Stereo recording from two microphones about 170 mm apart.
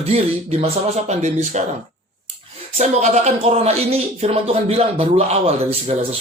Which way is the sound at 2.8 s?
40° right (ahead or behind).